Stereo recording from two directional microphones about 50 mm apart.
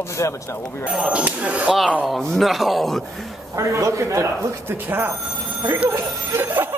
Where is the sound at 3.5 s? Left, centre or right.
Right.